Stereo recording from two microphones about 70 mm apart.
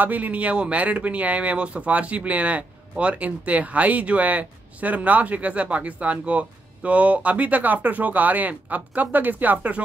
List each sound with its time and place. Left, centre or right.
0.0 s speech: right